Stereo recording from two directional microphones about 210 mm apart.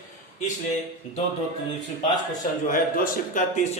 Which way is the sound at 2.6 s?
40° left (ahead or behind).